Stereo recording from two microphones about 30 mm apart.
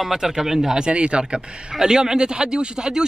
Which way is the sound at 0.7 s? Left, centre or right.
Right.